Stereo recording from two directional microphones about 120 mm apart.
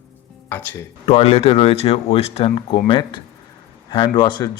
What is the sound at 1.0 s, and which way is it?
Speech, 55° left (ahead or behind).